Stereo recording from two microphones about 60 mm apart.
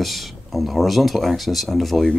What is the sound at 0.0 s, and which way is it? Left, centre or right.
Speech, centre.